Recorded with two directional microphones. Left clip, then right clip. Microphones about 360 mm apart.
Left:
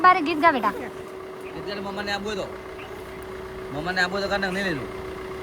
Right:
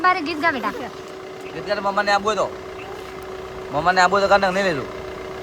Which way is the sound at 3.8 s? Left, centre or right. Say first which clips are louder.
Right 9 dB; centre.